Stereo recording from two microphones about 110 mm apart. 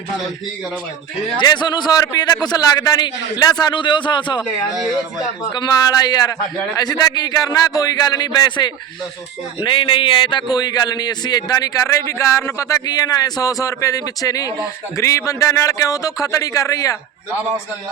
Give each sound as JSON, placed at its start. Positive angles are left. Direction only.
{"t": 1.4, "sound": "a man's voice", "side_deg": 45}
{"t": 5.4, "sound": "a man's voice", "side_deg": 40}